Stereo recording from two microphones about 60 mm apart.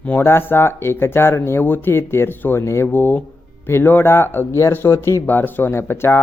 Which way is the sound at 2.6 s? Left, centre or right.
Left.